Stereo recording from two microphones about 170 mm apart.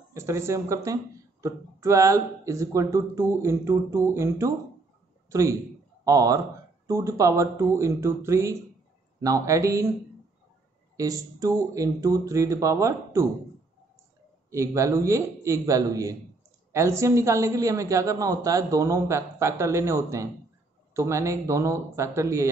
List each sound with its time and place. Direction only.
0.1 s a woman's voice: 15° right (ahead or behind)
11.0 s speech: 20° right (ahead or behind)
14.5 s a woman's voice: 15° right (ahead or behind)